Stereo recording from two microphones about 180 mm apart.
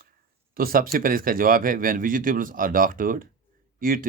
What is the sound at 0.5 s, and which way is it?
Speech, 55° right (ahead or behind).